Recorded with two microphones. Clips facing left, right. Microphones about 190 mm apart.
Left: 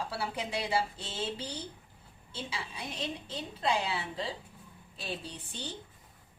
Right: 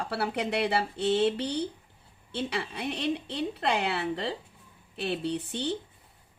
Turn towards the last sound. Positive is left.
turn(degrees=-65)  # may be behind; listen again after turning